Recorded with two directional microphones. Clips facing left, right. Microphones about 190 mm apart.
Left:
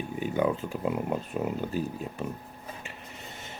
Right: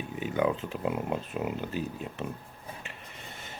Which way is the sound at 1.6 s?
45° left (ahead or behind).